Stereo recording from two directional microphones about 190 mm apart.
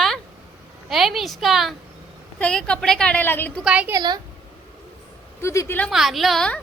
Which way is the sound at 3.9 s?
20° right (ahead or behind).